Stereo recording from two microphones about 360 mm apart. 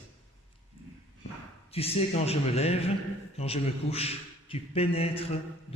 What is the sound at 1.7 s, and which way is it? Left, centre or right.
A man's voice, centre.